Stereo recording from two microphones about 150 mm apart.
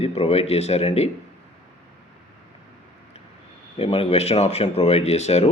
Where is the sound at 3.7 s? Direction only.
40° left (ahead or behind).